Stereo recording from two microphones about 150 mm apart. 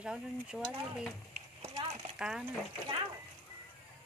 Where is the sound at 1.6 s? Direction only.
45° right (ahead or behind).